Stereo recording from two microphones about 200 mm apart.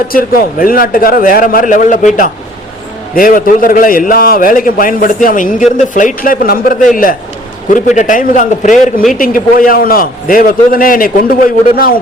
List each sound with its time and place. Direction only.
0.1 s a man's voice: 45° left (ahead or behind)